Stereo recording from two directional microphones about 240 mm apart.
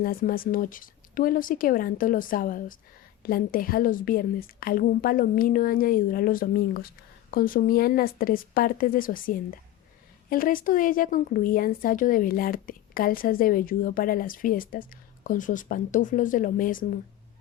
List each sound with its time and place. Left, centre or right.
0.0 s speech: left